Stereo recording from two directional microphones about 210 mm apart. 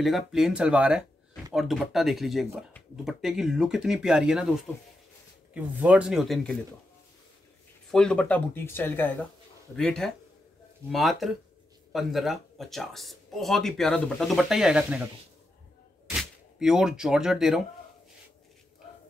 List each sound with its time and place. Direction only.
0.0 s speech: centre (ahead or behind)
5.5 s speech: 5° right (ahead or behind)
7.9 s speech: 5° left (ahead or behind)
16.1 s speech: centre (ahead or behind)